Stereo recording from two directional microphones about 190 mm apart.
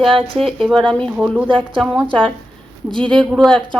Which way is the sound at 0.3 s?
Centre (ahead or behind).